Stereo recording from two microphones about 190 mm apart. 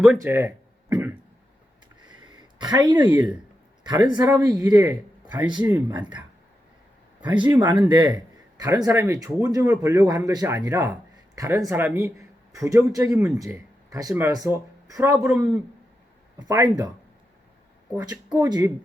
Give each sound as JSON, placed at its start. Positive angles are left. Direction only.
{"t": 0.2, "sound": "a sound", "side_deg": -15}
{"t": 4.1, "sound": "speech", "side_deg": -20}
{"t": 7.4, "sound": "speech", "side_deg": -15}
{"t": 15.2, "sound": "speech", "side_deg": -5}
{"t": 16.5, "sound": "speech", "side_deg": -20}
{"t": 17.9, "sound": "speech", "side_deg": -20}